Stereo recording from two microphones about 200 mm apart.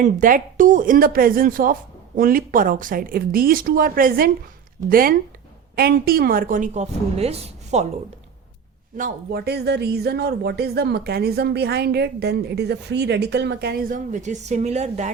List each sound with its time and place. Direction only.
0.0 s a woman's voice: 45° right (ahead or behind)
9.0 s speech: 45° right (ahead or behind)